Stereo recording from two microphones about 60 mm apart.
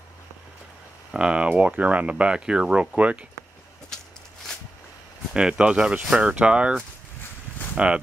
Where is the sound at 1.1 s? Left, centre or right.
Centre.